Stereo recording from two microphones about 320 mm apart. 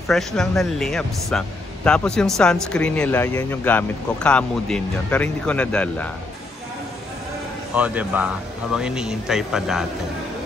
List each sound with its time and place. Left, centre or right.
0.1 s speech: centre
7.7 s speech: centre